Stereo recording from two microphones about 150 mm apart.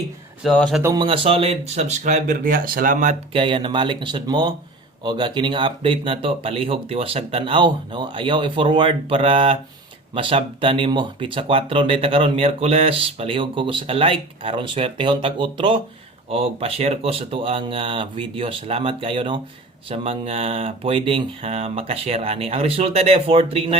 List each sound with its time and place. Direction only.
0.4 s speech: 5° left (ahead or behind)
0.9 s speech: 35° right (ahead or behind); by 3.2 s 60° right (ahead or behind)
3.3 s speech: 35° right (ahead or behind)